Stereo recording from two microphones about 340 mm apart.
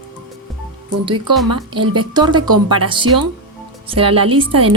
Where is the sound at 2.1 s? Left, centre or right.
Centre.